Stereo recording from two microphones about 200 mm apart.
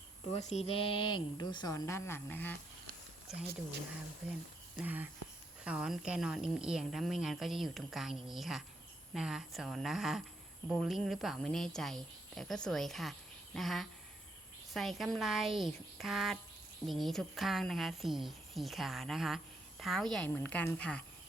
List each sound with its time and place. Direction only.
0.3 s speech: 35° left (ahead or behind); by 2.6 s 10° left (ahead or behind)
4.8 s speech: 10° right (ahead or behind)